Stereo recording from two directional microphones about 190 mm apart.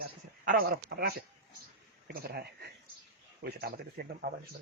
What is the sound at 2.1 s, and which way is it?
Speech, 55° right (ahead or behind).